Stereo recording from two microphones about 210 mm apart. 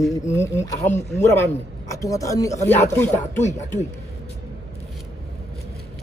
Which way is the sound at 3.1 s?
35° left (ahead or behind).